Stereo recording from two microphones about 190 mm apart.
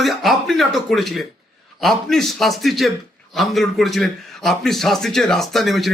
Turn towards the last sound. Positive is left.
turn(degrees=0)  # may be behind; listen again after turning